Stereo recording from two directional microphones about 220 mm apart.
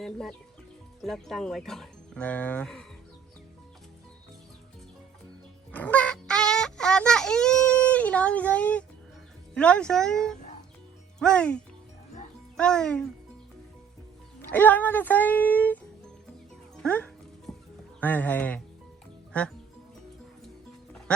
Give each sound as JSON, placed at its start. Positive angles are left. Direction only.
{"t": 0.0, "sound": "speech", "side_deg": 0}
{"t": 5.7, "sound": "a sound", "side_deg": 5}
{"t": 9.6, "sound": "speech", "side_deg": 5}
{"t": 14.5, "sound": "speech", "side_deg": 5}
{"t": 16.8, "sound": "music", "side_deg": 5}
{"t": 18.0, "sound": "speech", "side_deg": 10}